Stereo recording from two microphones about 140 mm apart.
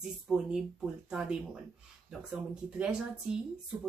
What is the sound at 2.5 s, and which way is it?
Speech, 5° right (ahead or behind).